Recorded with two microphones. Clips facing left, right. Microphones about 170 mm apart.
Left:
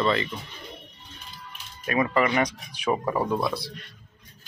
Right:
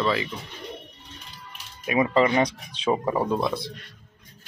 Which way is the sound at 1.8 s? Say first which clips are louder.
Right 3 dB; 20° right (ahead or behind).